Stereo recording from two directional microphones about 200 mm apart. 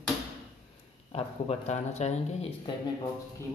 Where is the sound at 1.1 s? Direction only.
30° left (ahead or behind).